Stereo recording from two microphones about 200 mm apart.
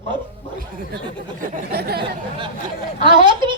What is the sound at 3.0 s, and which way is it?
Speech, 25° right (ahead or behind).